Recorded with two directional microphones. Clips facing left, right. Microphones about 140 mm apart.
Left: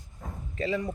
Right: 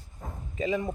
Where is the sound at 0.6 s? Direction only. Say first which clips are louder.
Right 1 dB; 20° right (ahead or behind).